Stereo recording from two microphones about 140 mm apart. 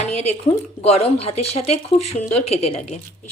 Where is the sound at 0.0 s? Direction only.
50° left (ahead or behind).